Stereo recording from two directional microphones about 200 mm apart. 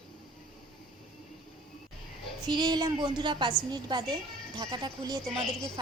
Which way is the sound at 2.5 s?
20° right (ahead or behind).